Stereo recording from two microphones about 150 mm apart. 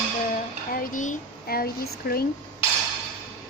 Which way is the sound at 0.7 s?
70° left (ahead or behind).